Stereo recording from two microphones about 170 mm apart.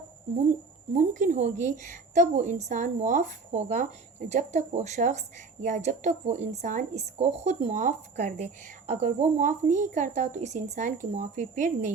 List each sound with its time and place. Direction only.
0.9 s a woman's voice: 45° right (ahead or behind)